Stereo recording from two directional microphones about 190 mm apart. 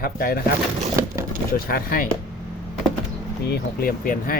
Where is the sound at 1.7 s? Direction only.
50° left (ahead or behind).